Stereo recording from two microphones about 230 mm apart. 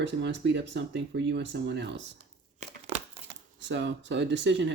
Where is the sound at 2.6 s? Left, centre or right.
Right.